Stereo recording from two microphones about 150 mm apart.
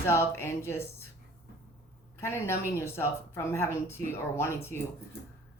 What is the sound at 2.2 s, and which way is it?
Speech, 15° left (ahead or behind).